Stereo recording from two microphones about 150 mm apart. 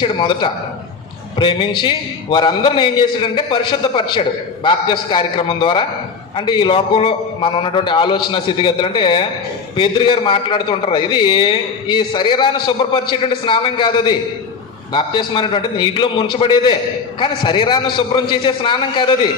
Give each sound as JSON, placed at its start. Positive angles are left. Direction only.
{"t": 0.0, "sound": "a man's voice", "side_deg": 35}